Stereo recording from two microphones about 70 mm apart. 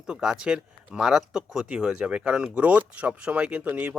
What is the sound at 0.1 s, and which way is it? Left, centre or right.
Speech, centre.